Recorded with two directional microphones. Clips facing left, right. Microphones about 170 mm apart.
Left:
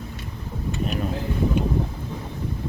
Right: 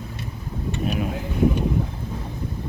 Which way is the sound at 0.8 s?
5° right (ahead or behind).